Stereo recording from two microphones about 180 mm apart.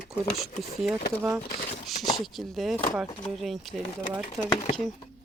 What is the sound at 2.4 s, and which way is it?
Speech, centre (ahead or behind).